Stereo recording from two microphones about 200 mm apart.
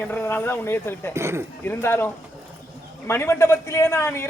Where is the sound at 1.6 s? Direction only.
10° left (ahead or behind).